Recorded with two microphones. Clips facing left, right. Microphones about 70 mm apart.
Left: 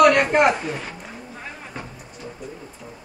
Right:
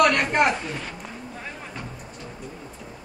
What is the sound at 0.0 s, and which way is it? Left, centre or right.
Speech, centre.